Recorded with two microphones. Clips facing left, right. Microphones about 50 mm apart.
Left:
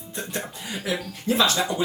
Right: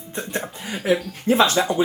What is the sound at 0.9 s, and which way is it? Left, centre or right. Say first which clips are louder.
Speech: right 7 dB; right.